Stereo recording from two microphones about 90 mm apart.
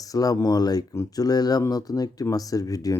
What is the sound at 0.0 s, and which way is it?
Speech, 40° left (ahead or behind).